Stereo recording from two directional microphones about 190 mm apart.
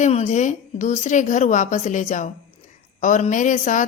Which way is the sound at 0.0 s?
40° left (ahead or behind).